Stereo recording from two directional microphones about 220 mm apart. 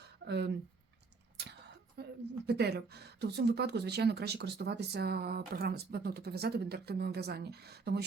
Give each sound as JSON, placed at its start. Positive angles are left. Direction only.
{"t": 0.3, "sound": "speech", "side_deg": -50}
{"t": 2.0, "sound": "a sound", "side_deg": -50}
{"t": 2.5, "sound": "speech", "side_deg": -45}